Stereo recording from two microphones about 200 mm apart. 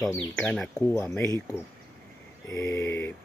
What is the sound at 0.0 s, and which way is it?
Speech, 5° left (ahead or behind).